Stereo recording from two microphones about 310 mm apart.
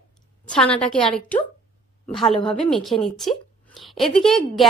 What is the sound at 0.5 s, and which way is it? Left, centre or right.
A woman's voice, centre.